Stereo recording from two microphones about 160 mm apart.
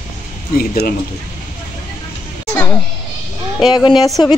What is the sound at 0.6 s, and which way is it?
Speech, 70° left (ahead or behind).